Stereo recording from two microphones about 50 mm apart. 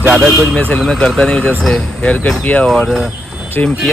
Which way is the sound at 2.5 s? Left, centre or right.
Left.